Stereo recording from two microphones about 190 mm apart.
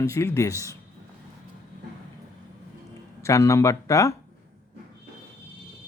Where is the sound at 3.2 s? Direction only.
15° left (ahead or behind).